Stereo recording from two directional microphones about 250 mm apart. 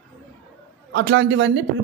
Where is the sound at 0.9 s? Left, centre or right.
Right.